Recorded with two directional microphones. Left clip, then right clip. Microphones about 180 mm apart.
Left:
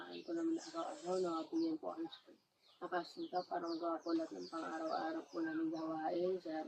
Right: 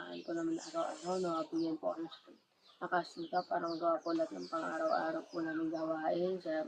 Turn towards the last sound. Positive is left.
turn(degrees=0)  # may be behind; listen again after turning